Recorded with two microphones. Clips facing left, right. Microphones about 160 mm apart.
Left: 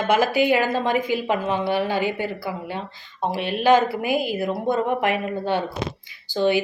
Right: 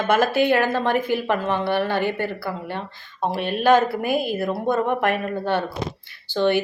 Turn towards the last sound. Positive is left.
turn(degrees=10)  # may be behind; listen again after turning